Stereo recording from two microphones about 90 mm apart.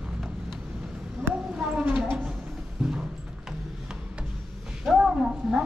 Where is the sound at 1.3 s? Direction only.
10° right (ahead or behind).